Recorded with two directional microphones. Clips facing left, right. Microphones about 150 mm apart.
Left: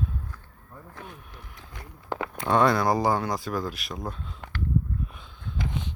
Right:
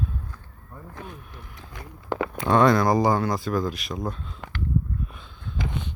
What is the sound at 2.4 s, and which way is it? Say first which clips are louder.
Speech: right 3 dB; 10° left (ahead or behind).